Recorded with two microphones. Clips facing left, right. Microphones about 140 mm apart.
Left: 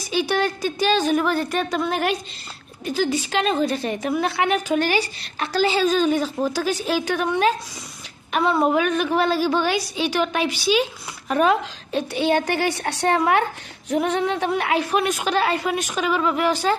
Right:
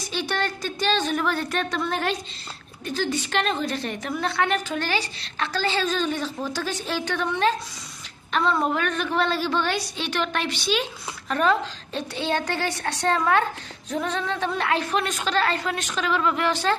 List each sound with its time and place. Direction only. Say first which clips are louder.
0.1 s a woman's voice: left 6 dB; 5° left (ahead or behind)